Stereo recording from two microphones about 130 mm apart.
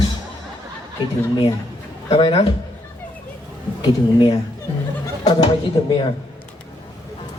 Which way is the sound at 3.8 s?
40° left (ahead or behind).